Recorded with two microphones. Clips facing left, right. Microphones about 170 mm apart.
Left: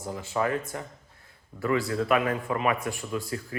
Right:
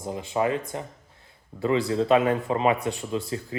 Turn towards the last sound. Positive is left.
turn(degrees=-25)  # may be behind; listen again after turning